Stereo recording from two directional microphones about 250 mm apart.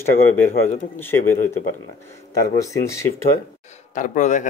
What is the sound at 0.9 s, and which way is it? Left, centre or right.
Speech, centre.